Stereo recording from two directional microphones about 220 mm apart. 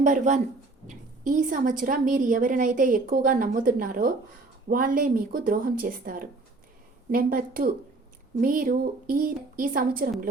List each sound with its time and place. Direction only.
0.0 s a woman's voice: 35° right (ahead or behind)